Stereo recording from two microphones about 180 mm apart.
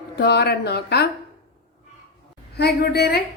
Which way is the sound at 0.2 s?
65° left (ahead or behind).